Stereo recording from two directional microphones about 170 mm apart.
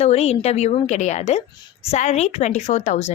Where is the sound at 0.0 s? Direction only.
40° left (ahead or behind).